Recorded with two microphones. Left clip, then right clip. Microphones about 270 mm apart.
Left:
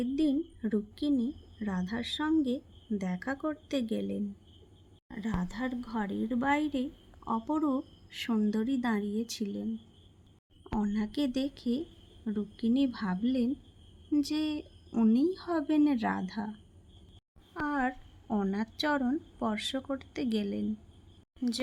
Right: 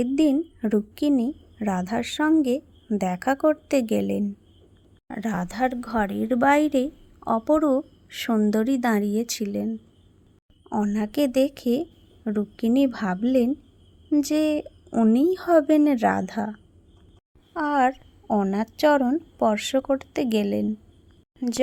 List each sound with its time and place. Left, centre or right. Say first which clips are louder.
0.0 s a woman's voice: right 9 dB; right
10.8 s a woman's voice: right 9 dB; right